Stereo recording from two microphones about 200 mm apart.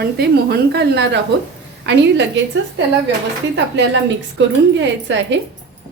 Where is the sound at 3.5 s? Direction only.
65° right (ahead or behind).